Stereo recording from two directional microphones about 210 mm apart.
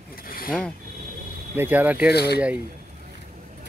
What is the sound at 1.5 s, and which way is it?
Speech, 10° right (ahead or behind).